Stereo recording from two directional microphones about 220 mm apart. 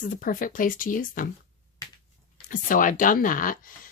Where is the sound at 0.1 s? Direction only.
40° left (ahead or behind).